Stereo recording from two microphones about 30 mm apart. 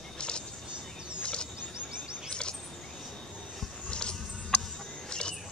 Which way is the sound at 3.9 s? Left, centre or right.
Left.